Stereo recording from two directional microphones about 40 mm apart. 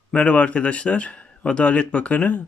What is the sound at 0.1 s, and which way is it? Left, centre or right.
Speech, left.